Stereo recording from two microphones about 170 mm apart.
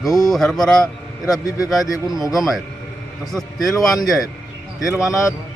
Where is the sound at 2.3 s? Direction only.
Centre (ahead or behind).